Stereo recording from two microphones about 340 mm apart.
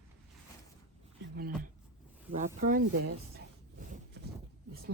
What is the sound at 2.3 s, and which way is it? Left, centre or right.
Speech, right.